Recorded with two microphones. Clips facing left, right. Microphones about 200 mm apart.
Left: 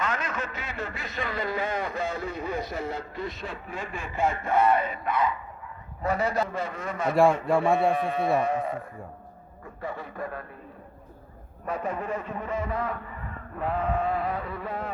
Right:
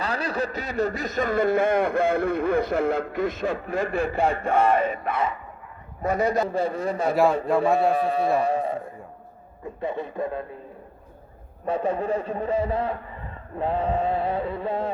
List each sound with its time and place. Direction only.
0.0 s a man's voice: 35° right (ahead or behind); by 6.2 s 20° right (ahead or behind)
6.4 s a man's voice: 35° right (ahead or behind)
9.8 s a man's voice: 20° right (ahead or behind)
11.6 s a man's voice: 30° right (ahead or behind)